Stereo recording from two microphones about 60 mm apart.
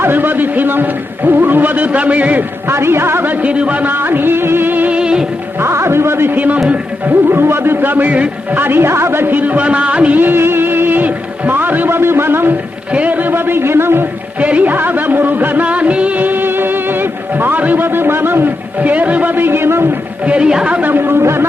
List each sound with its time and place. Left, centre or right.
0.0 s music: right
2.6 s music: right
3.9 s music: right
4.9 s music: centre
5.5 s music: right
6.3 s speech: right
7.0 s music: right
8.5 s music: right
10.2 s speech: right
12.9 s music: right
14.3 s music: right
20.2 s speech: centre
20.9 s music: right